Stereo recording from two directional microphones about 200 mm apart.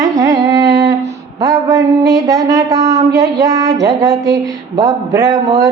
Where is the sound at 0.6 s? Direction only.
55° right (ahead or behind).